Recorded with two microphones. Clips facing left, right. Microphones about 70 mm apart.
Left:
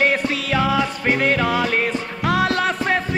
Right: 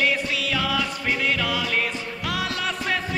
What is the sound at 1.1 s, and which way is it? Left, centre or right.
Music, left.